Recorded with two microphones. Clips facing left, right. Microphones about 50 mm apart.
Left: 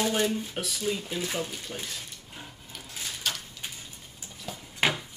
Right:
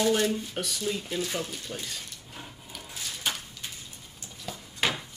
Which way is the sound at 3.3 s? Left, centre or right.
Centre.